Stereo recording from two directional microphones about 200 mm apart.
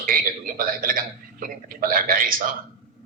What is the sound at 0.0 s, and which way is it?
A man's voice, 45° right (ahead or behind).